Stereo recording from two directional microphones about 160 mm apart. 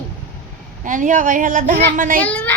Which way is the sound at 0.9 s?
55° right (ahead or behind).